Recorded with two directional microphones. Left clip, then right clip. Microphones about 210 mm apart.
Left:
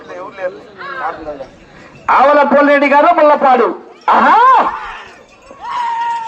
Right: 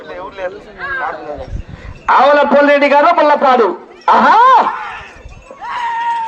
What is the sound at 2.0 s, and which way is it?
A man's voice, 35° right (ahead or behind).